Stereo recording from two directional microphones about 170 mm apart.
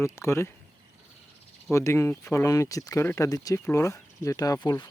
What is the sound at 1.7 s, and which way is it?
Speech, 15° left (ahead or behind).